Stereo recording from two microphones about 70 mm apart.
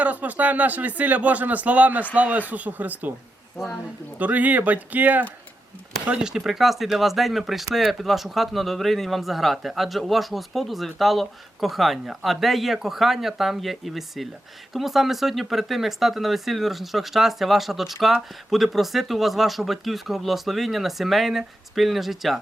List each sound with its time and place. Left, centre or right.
0.0 s speech: right
4.2 s speech: right
6.1 s speech: centre